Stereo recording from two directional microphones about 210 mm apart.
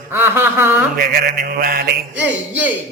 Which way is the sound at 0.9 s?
45° right (ahead or behind).